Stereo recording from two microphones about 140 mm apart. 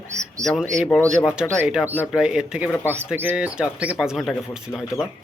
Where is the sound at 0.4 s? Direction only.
25° right (ahead or behind).